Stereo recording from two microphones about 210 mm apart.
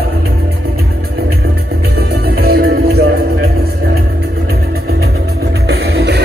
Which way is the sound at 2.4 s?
50° right (ahead or behind).